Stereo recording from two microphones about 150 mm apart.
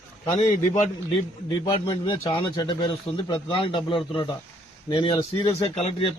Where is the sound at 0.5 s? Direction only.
55° left (ahead or behind).